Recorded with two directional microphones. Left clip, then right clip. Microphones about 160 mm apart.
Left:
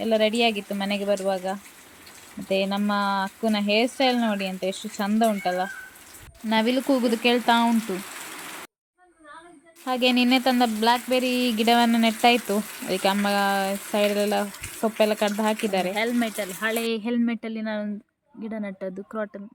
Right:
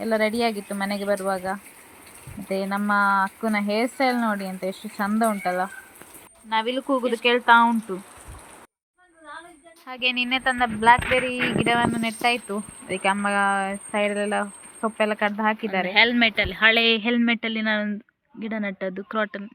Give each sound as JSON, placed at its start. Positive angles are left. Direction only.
{"t": 0.0, "sound": "speech", "side_deg": 5}
{"t": 6.5, "sound": "speech", "side_deg": 35}
{"t": 6.9, "sound": "speech", "side_deg": 20}
{"t": 7.9, "sound": "speech", "side_deg": 0}
{"t": 9.8, "sound": "speech", "side_deg": 30}
{"t": 10.8, "sound": "speech", "side_deg": 10}
{"t": 11.6, "sound": "speech", "side_deg": 30}
{"t": 15.9, "sound": "speech", "side_deg": 0}